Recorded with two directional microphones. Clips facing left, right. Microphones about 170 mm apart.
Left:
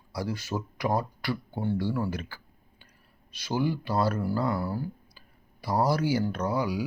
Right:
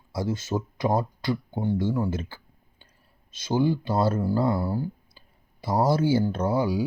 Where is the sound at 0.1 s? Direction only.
25° right (ahead or behind).